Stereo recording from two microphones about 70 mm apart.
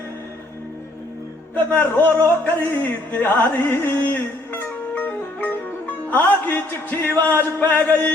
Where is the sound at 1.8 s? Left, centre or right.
Left.